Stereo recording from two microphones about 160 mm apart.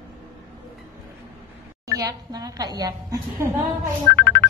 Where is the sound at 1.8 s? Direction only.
20° right (ahead or behind).